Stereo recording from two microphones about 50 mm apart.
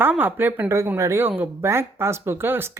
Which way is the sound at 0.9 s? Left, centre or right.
Right.